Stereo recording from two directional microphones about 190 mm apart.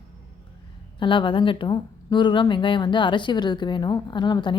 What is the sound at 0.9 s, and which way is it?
Speech, 25° left (ahead or behind).